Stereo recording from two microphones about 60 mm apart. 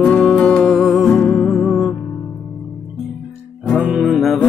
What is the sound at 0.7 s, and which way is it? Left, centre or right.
Music, centre.